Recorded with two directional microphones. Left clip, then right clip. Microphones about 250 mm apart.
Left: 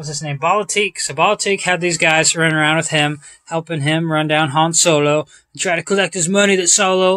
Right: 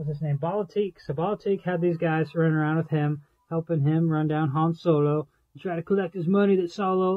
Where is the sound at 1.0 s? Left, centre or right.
Centre.